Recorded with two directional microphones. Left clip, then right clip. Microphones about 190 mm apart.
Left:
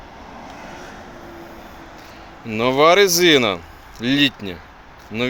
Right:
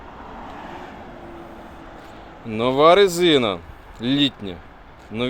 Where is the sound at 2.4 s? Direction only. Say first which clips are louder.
Left 1 dB; 5° left (ahead or behind).